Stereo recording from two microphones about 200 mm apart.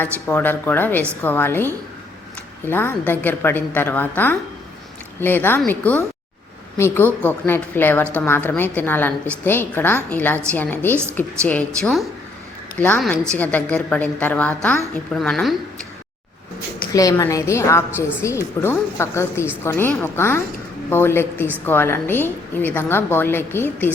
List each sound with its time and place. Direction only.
0.0 s a woman's voice: 10° left (ahead or behind)
16.9 s a woman's voice: 15° left (ahead or behind)